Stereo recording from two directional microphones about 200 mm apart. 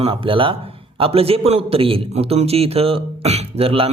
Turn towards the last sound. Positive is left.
turn(degrees=-30)  # may be behind; listen again after turning